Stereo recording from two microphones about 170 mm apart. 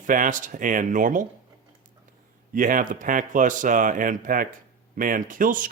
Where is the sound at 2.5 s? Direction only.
50° right (ahead or behind).